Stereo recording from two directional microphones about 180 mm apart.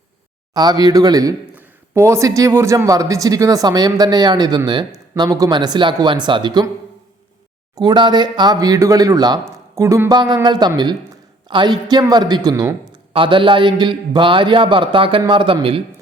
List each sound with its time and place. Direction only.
0.5 s speech: 20° right (ahead or behind)
7.8 s speech: 25° right (ahead or behind)